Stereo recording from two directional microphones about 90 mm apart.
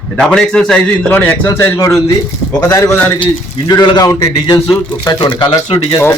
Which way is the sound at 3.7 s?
50° left (ahead or behind).